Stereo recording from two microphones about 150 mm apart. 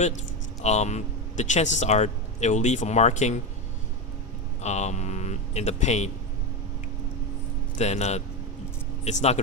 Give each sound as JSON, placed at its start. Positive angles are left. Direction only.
{"t": 0.6, "sound": "speech", "side_deg": 50}
{"t": 4.6, "sound": "speech", "side_deg": 50}
{"t": 7.8, "sound": "speech", "side_deg": 50}